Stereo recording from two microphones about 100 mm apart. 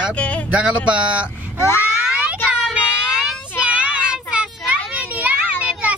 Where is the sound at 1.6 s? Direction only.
25° left (ahead or behind).